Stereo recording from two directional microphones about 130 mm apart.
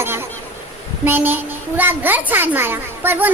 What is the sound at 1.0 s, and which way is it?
A child's voice, 15° right (ahead or behind).